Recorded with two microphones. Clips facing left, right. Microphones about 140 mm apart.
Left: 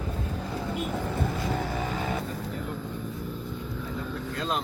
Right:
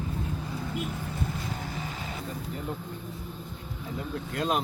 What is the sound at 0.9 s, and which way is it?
Vehicle, 60° left (ahead or behind).